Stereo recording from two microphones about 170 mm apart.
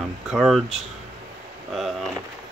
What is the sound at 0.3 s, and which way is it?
Speech, centre (ahead or behind).